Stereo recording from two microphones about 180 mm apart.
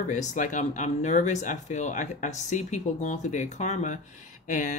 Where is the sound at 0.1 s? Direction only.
45° left (ahead or behind).